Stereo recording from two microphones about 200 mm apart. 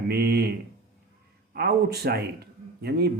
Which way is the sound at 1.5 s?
50° right (ahead or behind).